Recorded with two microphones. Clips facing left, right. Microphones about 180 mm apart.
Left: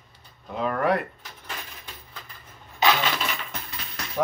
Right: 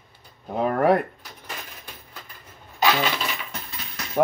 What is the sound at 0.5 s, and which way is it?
Speech, 45° right (ahead or behind).